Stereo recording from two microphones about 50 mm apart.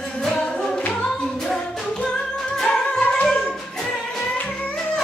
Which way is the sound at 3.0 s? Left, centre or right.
Left.